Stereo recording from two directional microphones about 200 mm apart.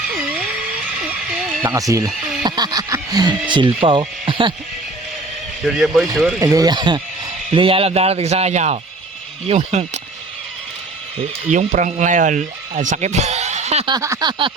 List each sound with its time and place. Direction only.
0.1 s a sound: 5° right (ahead or behind)
1.0 s music: 5° right (ahead or behind)
2.0 s neigh: centre (ahead or behind)
2.4 s a sound: 20° right (ahead or behind)
3.5 s speech: 25° right (ahead or behind)
5.6 s speech: centre (ahead or behind)
6.4 s speech: 20° right (ahead or behind); by 10.0 s 35° right (ahead or behind)
11.5 s speech: 40° right (ahead or behind)
13.9 s speech: 20° right (ahead or behind)